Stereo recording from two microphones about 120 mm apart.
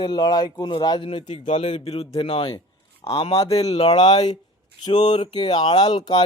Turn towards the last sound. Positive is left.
turn(degrees=40)  # may be behind; listen again after turning